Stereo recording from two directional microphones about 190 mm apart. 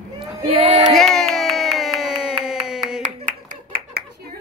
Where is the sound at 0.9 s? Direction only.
Centre (ahead or behind).